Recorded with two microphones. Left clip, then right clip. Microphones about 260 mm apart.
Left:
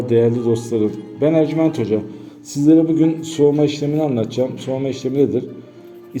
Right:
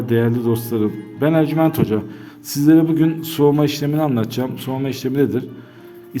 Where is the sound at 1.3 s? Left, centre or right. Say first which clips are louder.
Even; right.